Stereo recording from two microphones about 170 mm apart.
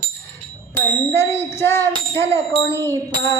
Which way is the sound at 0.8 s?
15° left (ahead or behind).